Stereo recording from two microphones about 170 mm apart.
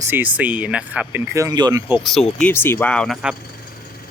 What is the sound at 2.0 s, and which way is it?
Speech, centre (ahead or behind).